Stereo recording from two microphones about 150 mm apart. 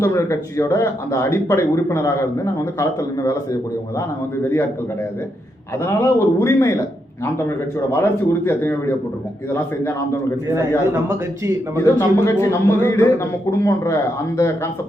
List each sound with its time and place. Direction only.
0.0 s speech: 20° left (ahead or behind)
5.8 s speech: 20° left (ahead or behind)
7.9 s speech: 20° left (ahead or behind)
11.8 s speech: 20° left (ahead or behind)